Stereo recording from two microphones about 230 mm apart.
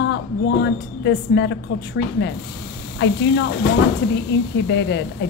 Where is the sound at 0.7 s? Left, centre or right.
Left.